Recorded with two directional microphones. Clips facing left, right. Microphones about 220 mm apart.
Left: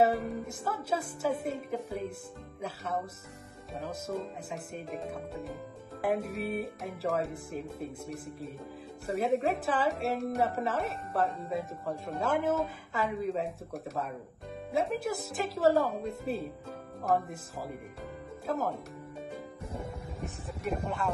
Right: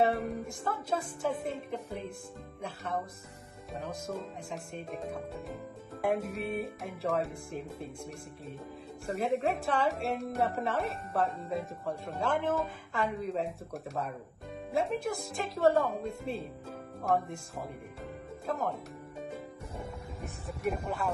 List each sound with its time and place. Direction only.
0.0 s a woman's voice: centre (ahead or behind)
14.7 s a woman's voice: centre (ahead or behind)
19.7 s music: 30° left (ahead or behind)
20.6 s speech: 5° right (ahead or behind)